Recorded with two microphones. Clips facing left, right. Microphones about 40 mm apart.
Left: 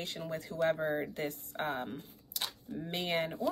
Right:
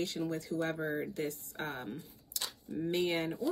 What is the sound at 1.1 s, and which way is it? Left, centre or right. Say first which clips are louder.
Speech: even; left.